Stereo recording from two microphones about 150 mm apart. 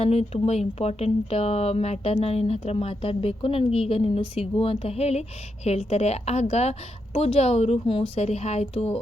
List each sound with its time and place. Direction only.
0.0 s a woman's voice: 40° left (ahead or behind)